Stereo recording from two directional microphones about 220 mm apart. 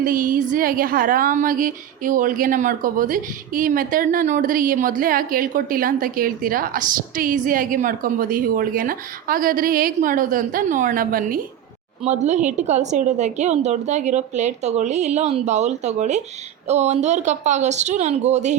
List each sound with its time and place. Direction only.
0.0 s a woman's voice: 40° right (ahead or behind)